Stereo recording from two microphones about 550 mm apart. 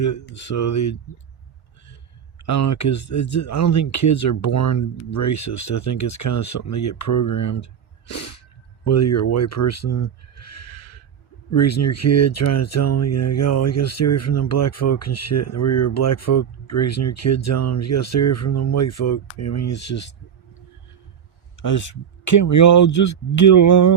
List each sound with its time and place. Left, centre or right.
0.3 s speech: left
2.5 s speech: left
8.8 s speech: left
21.6 s speech: left